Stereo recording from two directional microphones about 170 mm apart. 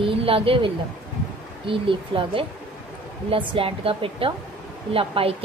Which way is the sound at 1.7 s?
30° right (ahead or behind).